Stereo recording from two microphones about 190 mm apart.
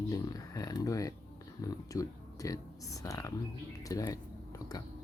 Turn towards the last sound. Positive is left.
turn(degrees=20)  # may be behind; listen again after turning